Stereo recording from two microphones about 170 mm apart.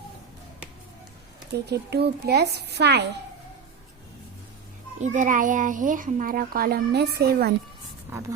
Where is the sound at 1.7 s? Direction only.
75° right (ahead or behind).